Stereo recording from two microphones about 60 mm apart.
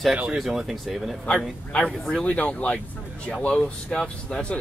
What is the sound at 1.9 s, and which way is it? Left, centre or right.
Speech, centre.